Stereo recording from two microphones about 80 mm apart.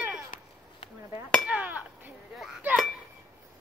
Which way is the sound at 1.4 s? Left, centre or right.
Centre.